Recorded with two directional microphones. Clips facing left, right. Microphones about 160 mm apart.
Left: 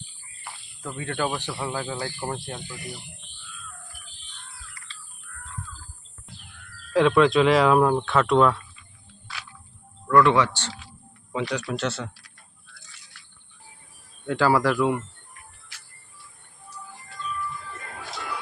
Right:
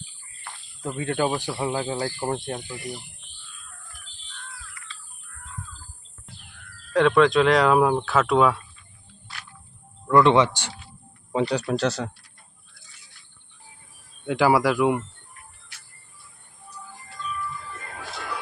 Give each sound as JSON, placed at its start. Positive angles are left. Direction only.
{"t": 0.8, "sound": "speech", "side_deg": -25}
{"t": 1.7, "sound": "speech", "side_deg": -30}
{"t": 4.9, "sound": "bird", "side_deg": 35}
{"t": 6.9, "sound": "speech", "side_deg": 0}
{"t": 10.1, "sound": "speech", "side_deg": -20}
{"t": 11.3, "sound": "speech", "side_deg": -35}
{"t": 14.3, "sound": "speech", "side_deg": -15}